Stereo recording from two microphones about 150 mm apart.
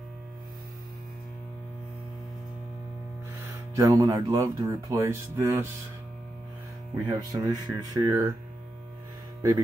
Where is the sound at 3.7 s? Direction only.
20° right (ahead or behind).